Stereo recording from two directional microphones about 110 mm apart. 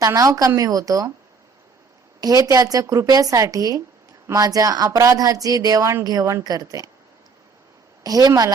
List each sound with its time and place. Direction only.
0.0 s a woman's voice: 30° right (ahead or behind)
2.2 s a woman's voice: 35° right (ahead or behind)
8.0 s a woman's voice: 35° right (ahead or behind)